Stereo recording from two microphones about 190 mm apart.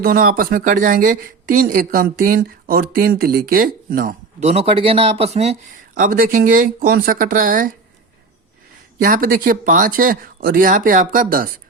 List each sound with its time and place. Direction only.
0.0 s speech: 50° right (ahead or behind); by 5.5 s 35° right (ahead or behind)
5.9 s speech: 45° right (ahead or behind)
9.0 s speech: 50° right (ahead or behind)